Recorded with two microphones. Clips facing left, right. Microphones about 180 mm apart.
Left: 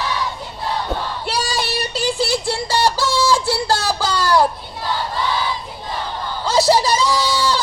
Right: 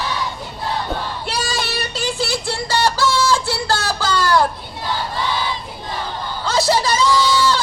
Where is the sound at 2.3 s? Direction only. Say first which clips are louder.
Left 2 dB; 10° left (ahead or behind).